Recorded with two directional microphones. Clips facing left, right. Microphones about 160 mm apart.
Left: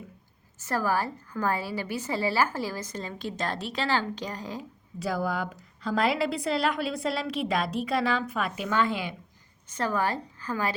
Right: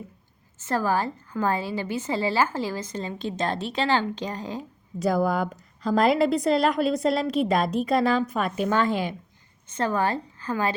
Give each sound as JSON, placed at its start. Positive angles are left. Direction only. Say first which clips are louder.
{"t": 0.6, "sound": "a woman's voice", "louder": "right 3 dB", "side_deg": -25}
{"t": 4.9, "sound": "a woman's voice", "louder": "right 6 dB", "side_deg": -45}
{"t": 9.6, "sound": "a woman's voice", "louder": "right 3 dB", "side_deg": -25}